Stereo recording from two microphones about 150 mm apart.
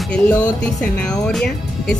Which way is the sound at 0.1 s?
10° left (ahead or behind).